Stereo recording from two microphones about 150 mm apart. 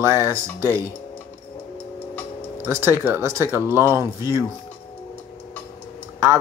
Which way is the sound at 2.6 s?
15° right (ahead or behind).